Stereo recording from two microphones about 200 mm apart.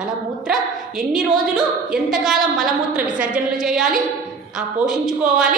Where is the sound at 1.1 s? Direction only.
Centre (ahead or behind).